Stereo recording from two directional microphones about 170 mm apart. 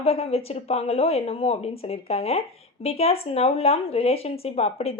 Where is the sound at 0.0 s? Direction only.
35° left (ahead or behind).